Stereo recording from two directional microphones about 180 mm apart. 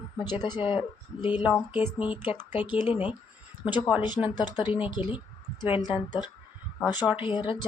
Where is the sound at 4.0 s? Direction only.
25° left (ahead or behind).